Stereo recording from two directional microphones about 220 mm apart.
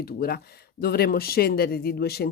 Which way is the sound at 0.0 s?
45° left (ahead or behind).